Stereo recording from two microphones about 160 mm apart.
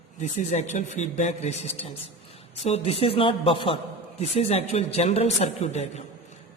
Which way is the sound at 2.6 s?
40° left (ahead or behind).